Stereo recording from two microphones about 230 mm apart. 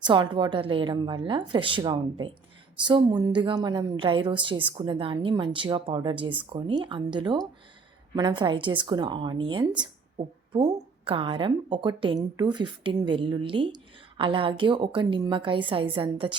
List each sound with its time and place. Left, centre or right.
0.0 s a woman's voice: right